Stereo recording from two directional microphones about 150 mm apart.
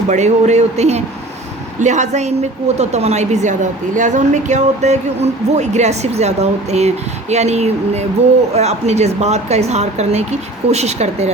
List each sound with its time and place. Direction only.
0.1 s a woman's voice: 50° right (ahead or behind)